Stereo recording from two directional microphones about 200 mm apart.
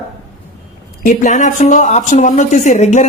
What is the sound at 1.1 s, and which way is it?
A woman's voice, 40° left (ahead or behind).